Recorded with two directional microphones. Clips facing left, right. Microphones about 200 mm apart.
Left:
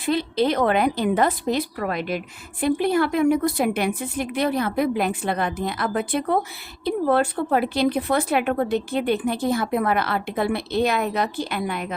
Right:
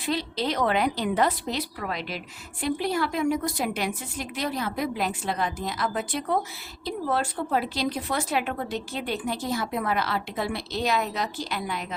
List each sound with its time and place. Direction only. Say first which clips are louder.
0.0 s a woman's voice: left 7 dB; 55° left (ahead or behind)